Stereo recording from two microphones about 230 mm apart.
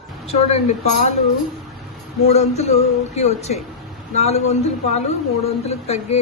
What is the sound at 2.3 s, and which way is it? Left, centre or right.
A woman's voice, left.